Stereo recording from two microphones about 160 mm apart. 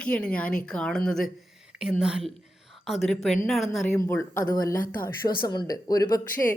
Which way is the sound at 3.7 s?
10° left (ahead or behind).